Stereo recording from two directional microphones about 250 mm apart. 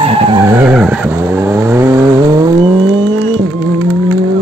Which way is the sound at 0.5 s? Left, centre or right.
Centre.